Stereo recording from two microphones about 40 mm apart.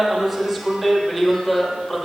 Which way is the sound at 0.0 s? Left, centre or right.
Centre.